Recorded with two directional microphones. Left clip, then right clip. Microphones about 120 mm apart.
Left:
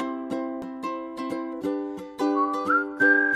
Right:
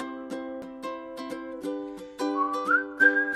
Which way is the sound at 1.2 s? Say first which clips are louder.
Left 5 dB; 15° left (ahead or behind).